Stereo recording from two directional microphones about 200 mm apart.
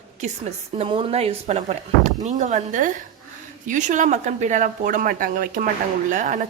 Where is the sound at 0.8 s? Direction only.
30° right (ahead or behind).